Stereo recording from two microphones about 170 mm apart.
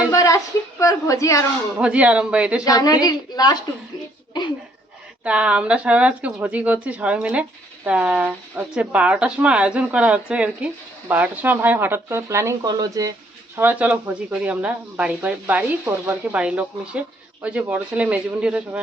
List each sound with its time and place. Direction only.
0.1 s a sound: 20° left (ahead or behind)
1.8 s speech: 5° right (ahead or behind)
2.6 s a woman's voice: 20° left (ahead or behind)
5.2 s speech: 5° right (ahead or behind)
13.6 s speech: 10° right (ahead or behind)